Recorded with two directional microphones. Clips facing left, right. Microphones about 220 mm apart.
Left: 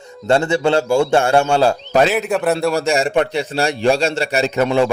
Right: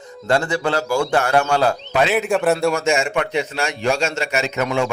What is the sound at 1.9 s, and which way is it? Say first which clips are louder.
Speech: left 5 dB; 40° left (ahead or behind).